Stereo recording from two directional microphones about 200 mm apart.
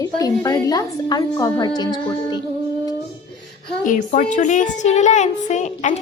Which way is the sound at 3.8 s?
40° left (ahead or behind).